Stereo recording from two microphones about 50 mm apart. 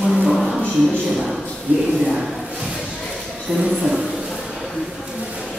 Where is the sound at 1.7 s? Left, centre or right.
Right.